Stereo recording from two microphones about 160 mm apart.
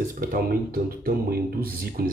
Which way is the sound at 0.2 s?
60° right (ahead or behind).